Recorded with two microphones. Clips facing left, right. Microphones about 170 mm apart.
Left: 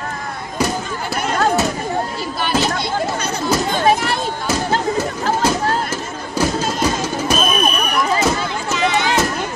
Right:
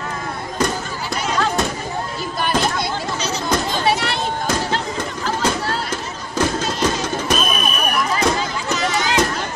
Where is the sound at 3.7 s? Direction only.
50° left (ahead or behind).